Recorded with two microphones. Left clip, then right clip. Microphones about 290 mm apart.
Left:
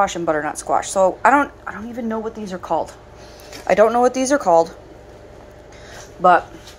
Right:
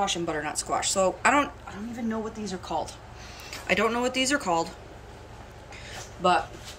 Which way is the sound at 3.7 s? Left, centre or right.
Centre.